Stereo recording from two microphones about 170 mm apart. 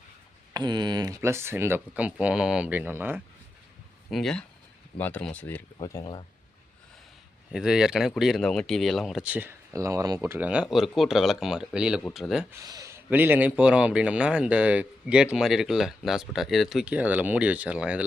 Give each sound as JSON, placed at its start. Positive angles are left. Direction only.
{"t": 0.5, "sound": "a man's voice", "side_deg": -25}
{"t": 4.1, "sound": "speech", "side_deg": 5}
{"t": 5.8, "sound": "speech", "side_deg": 25}
{"t": 7.5, "sound": "speech", "side_deg": -5}
{"t": 12.6, "sound": "a man's voice", "side_deg": -20}